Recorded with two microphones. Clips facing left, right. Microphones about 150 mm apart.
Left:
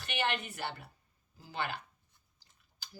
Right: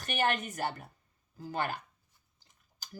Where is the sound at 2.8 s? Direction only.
45° right (ahead or behind).